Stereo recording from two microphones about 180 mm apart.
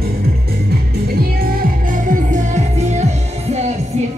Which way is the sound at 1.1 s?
55° right (ahead or behind).